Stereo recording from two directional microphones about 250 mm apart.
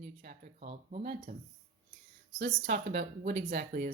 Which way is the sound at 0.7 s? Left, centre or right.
Right.